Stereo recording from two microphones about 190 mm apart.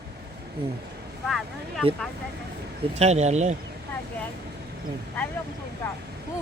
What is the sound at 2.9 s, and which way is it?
Speech, 35° right (ahead or behind).